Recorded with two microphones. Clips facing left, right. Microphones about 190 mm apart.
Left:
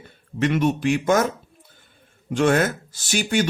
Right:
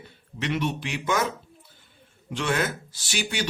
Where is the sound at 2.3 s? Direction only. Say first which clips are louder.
Left 8 dB; 50° left (ahead or behind).